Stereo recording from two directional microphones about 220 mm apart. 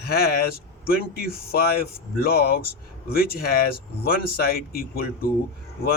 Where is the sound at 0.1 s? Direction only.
45° left (ahead or behind).